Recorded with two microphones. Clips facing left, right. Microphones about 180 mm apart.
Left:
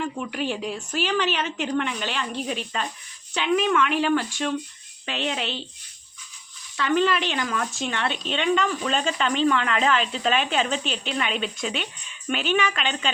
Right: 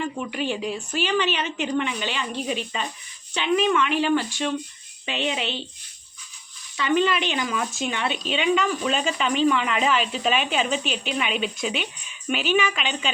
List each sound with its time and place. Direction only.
0.0 s a woman's voice: centre (ahead or behind)
6.7 s a woman's voice: centre (ahead or behind)